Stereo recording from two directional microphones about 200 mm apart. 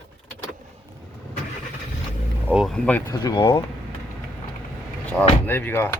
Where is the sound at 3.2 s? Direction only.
20° left (ahead or behind).